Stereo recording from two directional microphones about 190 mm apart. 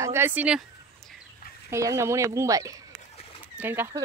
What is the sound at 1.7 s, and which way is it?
Speech, 15° right (ahead or behind).